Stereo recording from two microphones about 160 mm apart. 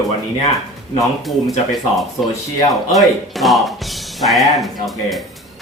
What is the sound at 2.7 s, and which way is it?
Speech, centre (ahead or behind).